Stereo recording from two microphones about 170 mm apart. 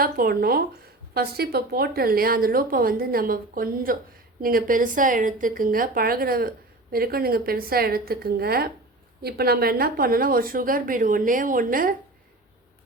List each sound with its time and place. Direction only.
0.0 s a woman's voice: 60° right (ahead or behind)